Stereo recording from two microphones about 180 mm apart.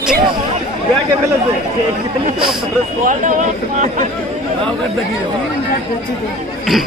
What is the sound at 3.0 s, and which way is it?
Speech, 45° right (ahead or behind).